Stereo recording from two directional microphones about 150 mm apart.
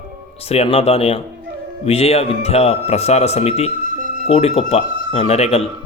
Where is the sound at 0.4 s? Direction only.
40° left (ahead or behind).